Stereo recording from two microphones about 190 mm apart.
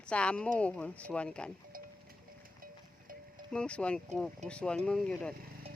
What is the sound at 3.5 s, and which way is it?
Speech, 5° left (ahead or behind).